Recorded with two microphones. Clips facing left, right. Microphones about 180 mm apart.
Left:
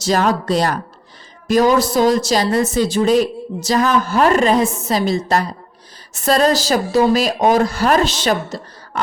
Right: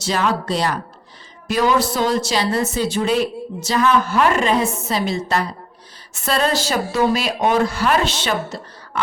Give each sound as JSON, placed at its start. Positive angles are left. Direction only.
{"t": 0.0, "sound": "a woman's voice", "side_deg": 40}